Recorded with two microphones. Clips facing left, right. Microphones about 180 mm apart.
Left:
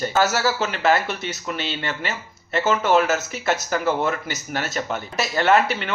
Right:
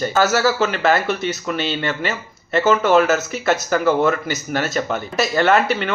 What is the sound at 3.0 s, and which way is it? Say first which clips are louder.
Speech: right 4 dB; 50° right (ahead or behind).